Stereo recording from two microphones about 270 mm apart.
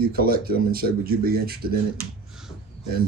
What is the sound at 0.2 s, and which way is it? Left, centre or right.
Speech, right.